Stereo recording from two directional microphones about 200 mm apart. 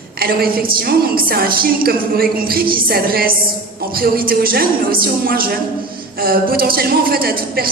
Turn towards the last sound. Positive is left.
turn(degrees=-50)  # may be behind; listen again after turning